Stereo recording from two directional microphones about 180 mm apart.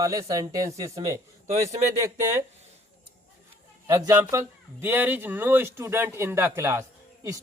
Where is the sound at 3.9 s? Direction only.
15° right (ahead or behind).